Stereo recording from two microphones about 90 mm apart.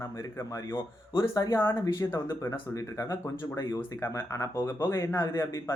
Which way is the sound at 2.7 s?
40° left (ahead or behind).